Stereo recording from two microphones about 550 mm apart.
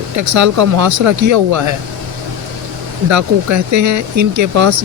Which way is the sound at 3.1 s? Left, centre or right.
Right.